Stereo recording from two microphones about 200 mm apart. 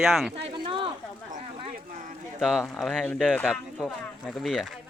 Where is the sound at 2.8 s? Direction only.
Centre (ahead or behind).